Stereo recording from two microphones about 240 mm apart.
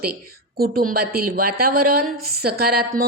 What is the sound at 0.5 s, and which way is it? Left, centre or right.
A woman's voice, right.